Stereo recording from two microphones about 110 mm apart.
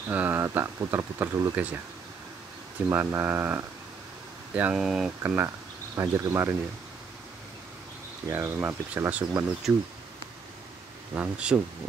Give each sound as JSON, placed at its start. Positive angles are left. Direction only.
{"t": 0.1, "sound": "speech", "side_deg": -20}
{"t": 2.9, "sound": "speech", "side_deg": -20}
{"t": 4.6, "sound": "speech", "side_deg": -10}
{"t": 5.2, "sound": "speech", "side_deg": -20}
{"t": 8.3, "sound": "speech", "side_deg": -20}
{"t": 11.1, "sound": "speech", "side_deg": -10}